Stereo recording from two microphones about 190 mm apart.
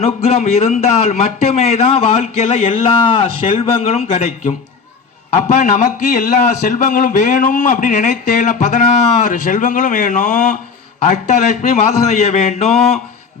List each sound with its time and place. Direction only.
0.0 s a man's voice: 35° left (ahead or behind)